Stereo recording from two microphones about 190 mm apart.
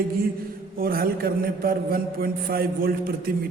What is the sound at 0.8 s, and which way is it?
A man's voice, 50° right (ahead or behind).